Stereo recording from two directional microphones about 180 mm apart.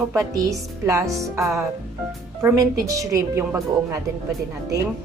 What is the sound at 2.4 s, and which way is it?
A woman's voice, 20° right (ahead or behind).